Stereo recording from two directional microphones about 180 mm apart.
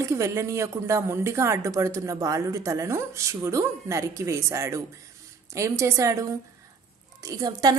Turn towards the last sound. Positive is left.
turn(degrees=-20)  # may be behind; listen again after turning